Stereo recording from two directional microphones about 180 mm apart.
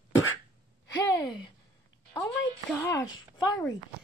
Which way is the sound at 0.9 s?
20° left (ahead or behind).